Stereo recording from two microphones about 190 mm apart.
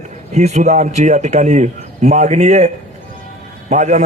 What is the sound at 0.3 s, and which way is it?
A man's voice, 35° right (ahead or behind).